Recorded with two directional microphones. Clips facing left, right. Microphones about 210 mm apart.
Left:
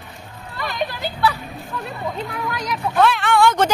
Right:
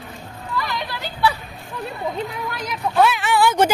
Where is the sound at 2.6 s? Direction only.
5° right (ahead or behind).